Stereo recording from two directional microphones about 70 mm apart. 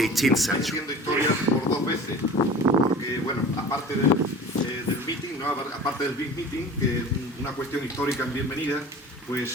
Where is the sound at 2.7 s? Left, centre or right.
Right.